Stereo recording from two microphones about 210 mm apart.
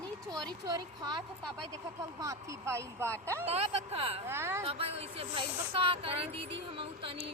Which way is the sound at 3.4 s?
30° right (ahead or behind).